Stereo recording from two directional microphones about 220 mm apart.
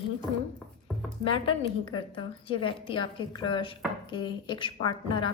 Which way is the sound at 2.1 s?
25° left (ahead or behind).